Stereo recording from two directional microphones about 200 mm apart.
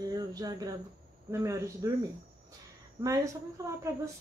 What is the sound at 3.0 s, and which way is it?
Speech, 15° right (ahead or behind).